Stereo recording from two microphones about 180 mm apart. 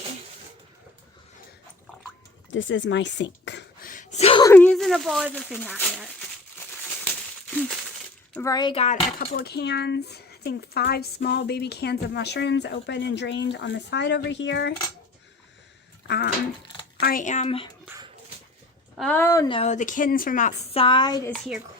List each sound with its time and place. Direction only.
2.5 s speech: 90° left
3.8 s a sound: 45° left (ahead or behind)
4.4 s speech: 10° left (ahead or behind)
8.3 s speech: 15° left (ahead or behind)
8.7 s speech: 35° left (ahead or behind)
9.1 s speech: 55° left (ahead or behind); by 14.7 s 80° left
16.0 s speech: 65° left (ahead or behind)
17.0 s speech: 50° left (ahead or behind); by 17.7 s 35° left (ahead or behind)
18.9 s speech: 10° left (ahead or behind)
19.5 s speech: 40° left (ahead or behind)
20.7 s speech: 30° left (ahead or behind)
21.2 s speech: 5° left (ahead or behind)